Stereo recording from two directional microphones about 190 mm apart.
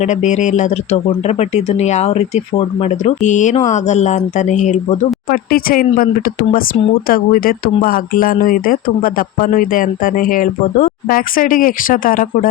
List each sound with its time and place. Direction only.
0.0 s speech: 40° left (ahead or behind)